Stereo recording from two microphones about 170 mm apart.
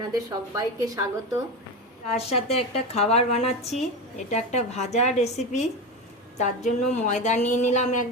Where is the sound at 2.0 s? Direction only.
40° left (ahead or behind).